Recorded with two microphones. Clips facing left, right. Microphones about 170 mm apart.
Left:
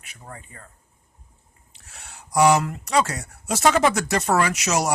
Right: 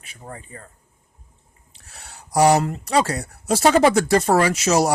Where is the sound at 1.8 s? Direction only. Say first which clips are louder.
Right 2 dB; 35° right (ahead or behind).